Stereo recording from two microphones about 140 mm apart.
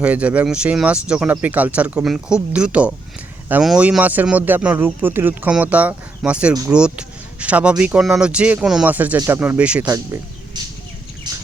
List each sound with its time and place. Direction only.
0.0 s speech: 10° right (ahead or behind)
9.8 s speech: 25° right (ahead or behind)
11.3 s squawk: 30° right (ahead or behind)